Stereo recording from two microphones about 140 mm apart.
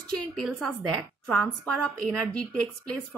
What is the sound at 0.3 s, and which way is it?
A woman's voice, 5° left (ahead or behind).